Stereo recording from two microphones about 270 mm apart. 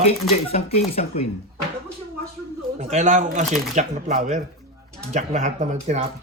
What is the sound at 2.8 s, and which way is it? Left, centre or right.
Speech, right.